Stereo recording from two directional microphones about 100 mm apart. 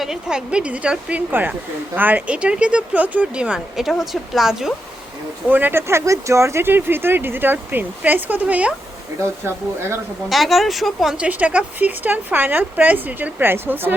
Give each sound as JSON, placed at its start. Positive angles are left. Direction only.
{"t": 0.0, "sound": "speech", "side_deg": -5}
{"t": 5.5, "sound": "speech", "side_deg": -20}
{"t": 10.2, "sound": "speech", "side_deg": 0}
{"t": 11.3, "sound": "speech", "side_deg": -15}